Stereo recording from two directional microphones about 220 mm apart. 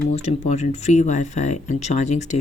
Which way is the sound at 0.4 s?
30° left (ahead or behind).